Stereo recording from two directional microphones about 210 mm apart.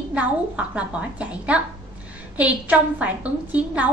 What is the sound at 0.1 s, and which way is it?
A woman's voice, 5° right (ahead or behind).